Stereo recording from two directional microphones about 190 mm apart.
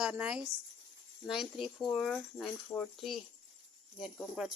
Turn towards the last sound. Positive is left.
turn(degrees=0)  # may be behind; listen again after turning